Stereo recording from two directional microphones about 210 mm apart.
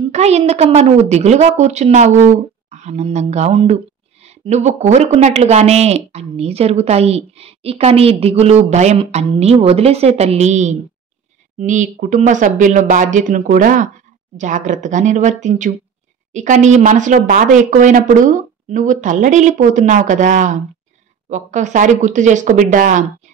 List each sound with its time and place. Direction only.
0.1 s a woman's voice: 30° right (ahead or behind)